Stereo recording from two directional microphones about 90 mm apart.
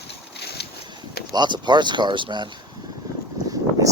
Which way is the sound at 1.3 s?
55° right (ahead or behind).